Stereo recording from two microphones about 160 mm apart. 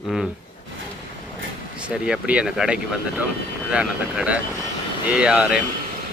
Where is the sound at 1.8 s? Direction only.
5° right (ahead or behind).